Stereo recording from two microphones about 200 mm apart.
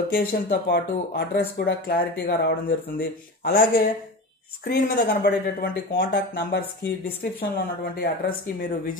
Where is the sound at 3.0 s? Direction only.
45° left (ahead or behind).